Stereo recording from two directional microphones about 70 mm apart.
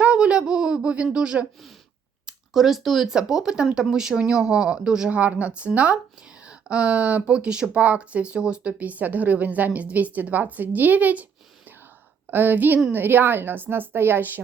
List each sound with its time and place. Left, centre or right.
0.0 s a sound: centre
2.2 s speech: centre; by 11.3 s right
12.3 s speech: right